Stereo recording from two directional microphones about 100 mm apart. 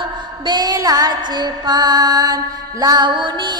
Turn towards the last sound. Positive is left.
turn(degrees=-50)  # may be behind; listen again after turning